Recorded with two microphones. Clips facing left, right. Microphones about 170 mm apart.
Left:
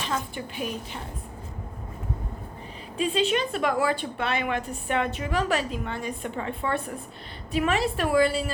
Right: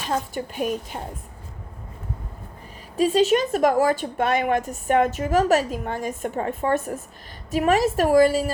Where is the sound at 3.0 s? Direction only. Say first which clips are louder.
Right 6 dB; 40° right (ahead or behind).